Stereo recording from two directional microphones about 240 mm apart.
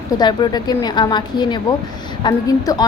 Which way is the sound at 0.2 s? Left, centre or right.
Centre.